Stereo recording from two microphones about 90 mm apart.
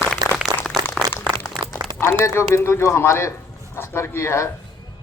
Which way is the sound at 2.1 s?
30° left (ahead or behind).